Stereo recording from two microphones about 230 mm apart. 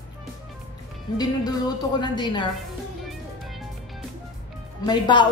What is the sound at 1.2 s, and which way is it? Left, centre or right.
A woman's voice, centre.